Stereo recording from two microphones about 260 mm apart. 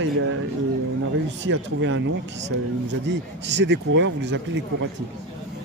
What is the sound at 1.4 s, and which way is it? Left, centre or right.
Speech, right.